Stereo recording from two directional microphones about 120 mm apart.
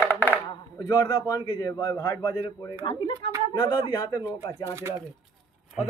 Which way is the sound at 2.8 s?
45° left (ahead or behind).